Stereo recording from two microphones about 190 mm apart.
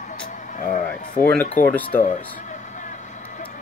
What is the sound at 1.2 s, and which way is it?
Speech, 10° left (ahead or behind).